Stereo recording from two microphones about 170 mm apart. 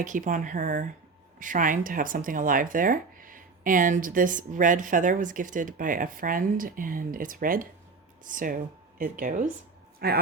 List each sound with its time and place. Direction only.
0.0 s speech: 50° right (ahead or behind)
10.0 s speech: 65° right (ahead or behind)